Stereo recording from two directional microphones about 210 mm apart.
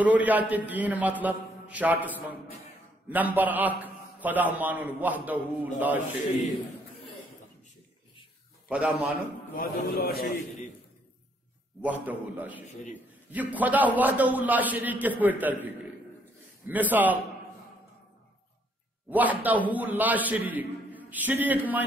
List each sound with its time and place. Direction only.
0.0 s a man's voice: 5° right (ahead or behind)
8.6 s a man's voice: 5° right (ahead or behind)
9.6 s a man's voice: 45° left (ahead or behind)
11.8 s a man's voice: 10° right (ahead or behind)
19.0 s a man's voice: 10° right (ahead or behind)